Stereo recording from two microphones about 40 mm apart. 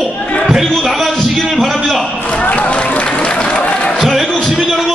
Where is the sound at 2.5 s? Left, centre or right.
Left.